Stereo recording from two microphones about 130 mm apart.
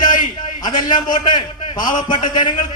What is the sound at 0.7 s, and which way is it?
A man's voice, 35° left (ahead or behind).